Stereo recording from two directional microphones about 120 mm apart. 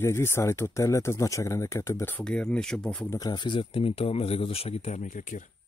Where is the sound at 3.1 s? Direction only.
35° left (ahead or behind); by 5.4 s 90° left.